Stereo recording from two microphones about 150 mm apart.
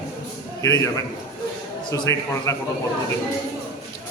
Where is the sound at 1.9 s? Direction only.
20° left (ahead or behind).